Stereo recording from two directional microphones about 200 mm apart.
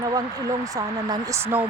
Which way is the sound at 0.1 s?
20° right (ahead or behind).